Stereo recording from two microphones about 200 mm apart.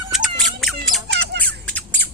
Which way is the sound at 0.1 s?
Centre (ahead or behind).